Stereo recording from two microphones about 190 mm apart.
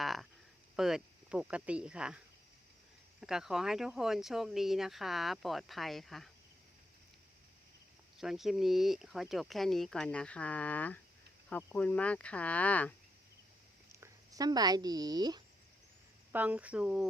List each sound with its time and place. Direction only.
0.0 s a sound: centre (ahead or behind)
0.8 s speech: centre (ahead or behind)
8.2 s speech: centre (ahead or behind)
14.0 s speech: 20° right (ahead or behind)
16.3 s speech: 10° right (ahead or behind)